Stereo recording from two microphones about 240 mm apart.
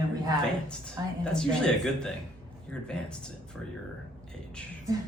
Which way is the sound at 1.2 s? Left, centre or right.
Centre.